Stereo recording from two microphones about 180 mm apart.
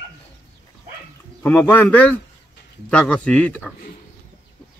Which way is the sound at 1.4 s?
10° left (ahead or behind).